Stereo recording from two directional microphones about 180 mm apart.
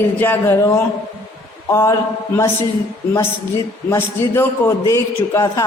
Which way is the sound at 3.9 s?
15° left (ahead or behind).